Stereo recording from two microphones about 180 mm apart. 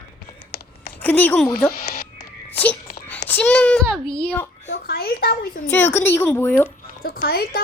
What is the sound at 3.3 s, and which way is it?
A child's voice, 5° left (ahead or behind).